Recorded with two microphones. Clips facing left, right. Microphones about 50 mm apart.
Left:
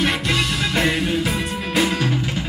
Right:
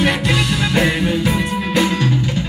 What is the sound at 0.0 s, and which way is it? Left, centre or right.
Music, centre.